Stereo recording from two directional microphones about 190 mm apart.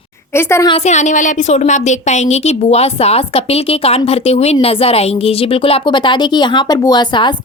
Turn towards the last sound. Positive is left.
turn(degrees=25)  # may be behind; listen again after turning